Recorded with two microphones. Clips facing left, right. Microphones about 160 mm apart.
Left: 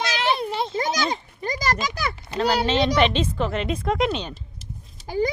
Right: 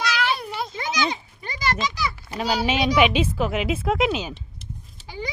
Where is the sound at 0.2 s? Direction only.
25° left (ahead or behind).